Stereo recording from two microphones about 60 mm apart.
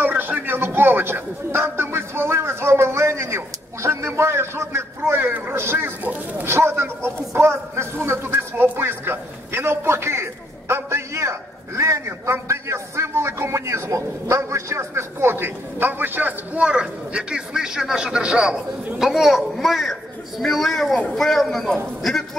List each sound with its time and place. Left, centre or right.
0.0 s speech: right
6.4 s a man's voice: right
17.1 s a man's voice: centre